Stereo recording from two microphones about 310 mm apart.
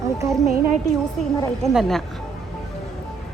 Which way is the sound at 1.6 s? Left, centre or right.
Centre.